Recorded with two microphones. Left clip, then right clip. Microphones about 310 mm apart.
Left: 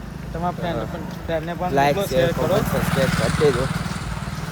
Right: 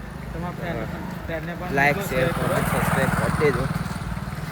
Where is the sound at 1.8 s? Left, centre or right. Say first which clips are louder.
Left 2 dB; centre.